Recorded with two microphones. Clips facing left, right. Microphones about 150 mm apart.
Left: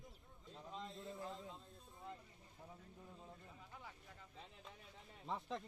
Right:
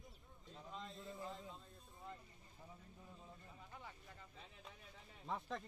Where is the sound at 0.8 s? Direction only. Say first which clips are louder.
Left 1 dB; centre (ahead or behind).